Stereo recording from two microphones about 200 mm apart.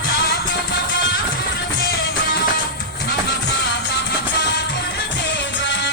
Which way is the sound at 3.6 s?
55° left (ahead or behind).